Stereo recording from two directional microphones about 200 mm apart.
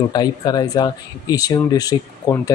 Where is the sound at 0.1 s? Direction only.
20° left (ahead or behind).